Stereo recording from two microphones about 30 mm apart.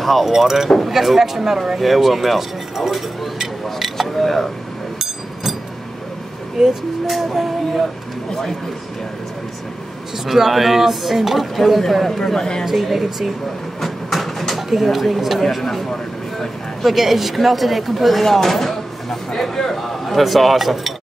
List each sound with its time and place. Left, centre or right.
0.0 s speech: centre
0.3 s speech: centre
4.2 s a sound: centre
5.0 s hammer: centre
6.6 s speech: centre
7.1 s speech: centre
8.3 s a man's voice: centre
10.1 s speech: centre
12.4 s speech: left
12.6 s speech: centre
13.7 s a sound: centre
14.7 s speech: centre
16.8 s speech: centre